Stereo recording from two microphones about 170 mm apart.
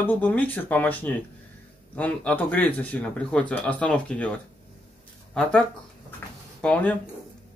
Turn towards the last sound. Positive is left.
turn(degrees=10)  # may be behind; listen again after turning